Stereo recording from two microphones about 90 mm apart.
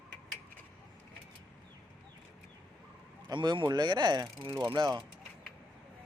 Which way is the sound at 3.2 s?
55° right (ahead or behind).